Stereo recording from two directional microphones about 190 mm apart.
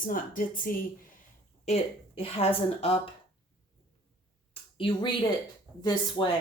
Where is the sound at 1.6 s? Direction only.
30° left (ahead or behind).